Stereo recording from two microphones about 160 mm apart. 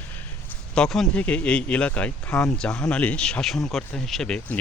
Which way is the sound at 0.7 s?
5° left (ahead or behind).